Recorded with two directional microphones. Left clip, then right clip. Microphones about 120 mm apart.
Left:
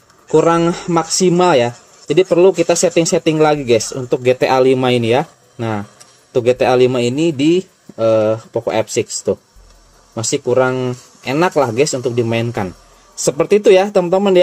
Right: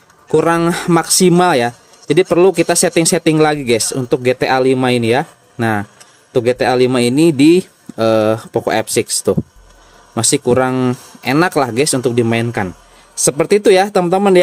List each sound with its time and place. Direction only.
0.3 s speech: 45° right (ahead or behind)
3.9 s speech: 25° right (ahead or behind)
5.6 s speech: 40° right (ahead or behind)
6.3 s speech: 25° right (ahead or behind)
6.9 s speech: 35° right (ahead or behind)
12.3 s speech: 25° right (ahead or behind); by 14.4 s 40° right (ahead or behind)